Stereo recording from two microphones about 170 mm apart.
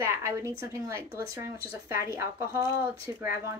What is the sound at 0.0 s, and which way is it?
Speech, 15° right (ahead or behind).